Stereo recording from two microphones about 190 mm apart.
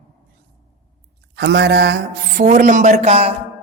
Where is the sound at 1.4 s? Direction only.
60° right (ahead or behind).